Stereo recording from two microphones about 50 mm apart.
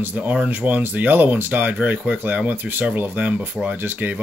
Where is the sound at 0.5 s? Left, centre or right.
Right.